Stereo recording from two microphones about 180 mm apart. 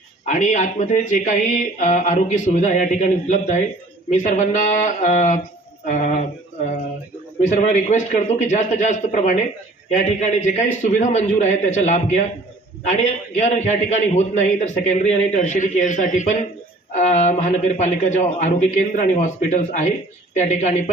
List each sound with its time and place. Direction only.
0.3 s speech: 40° left (ahead or behind)
7.5 s a man's voice: 40° left (ahead or behind)